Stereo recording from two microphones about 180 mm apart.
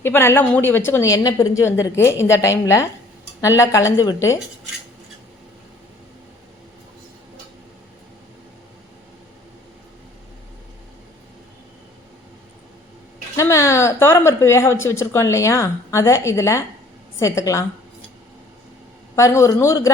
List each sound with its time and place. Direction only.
0.0 s a woman's voice: 15° left (ahead or behind)
13.3 s a woman's voice: 15° left (ahead or behind)
19.1 s a woman's voice: 15° left (ahead or behind)